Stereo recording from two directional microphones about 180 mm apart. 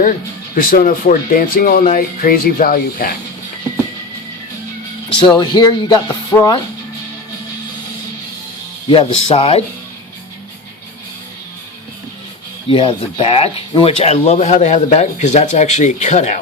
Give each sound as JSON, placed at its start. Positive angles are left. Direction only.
{"t": 0.5, "sound": "speech", "side_deg": 50}
{"t": 5.0, "sound": "speech", "side_deg": 25}
{"t": 6.1, "sound": "music", "side_deg": 15}
{"t": 8.9, "sound": "speech", "side_deg": 30}
{"t": 12.6, "sound": "speech", "side_deg": 30}